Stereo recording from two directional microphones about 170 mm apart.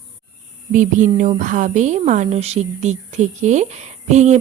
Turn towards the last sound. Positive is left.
turn(degrees=-40)  # may be behind; listen again after turning